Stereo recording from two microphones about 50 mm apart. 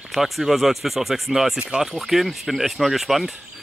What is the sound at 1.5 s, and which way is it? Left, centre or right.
Speech, centre.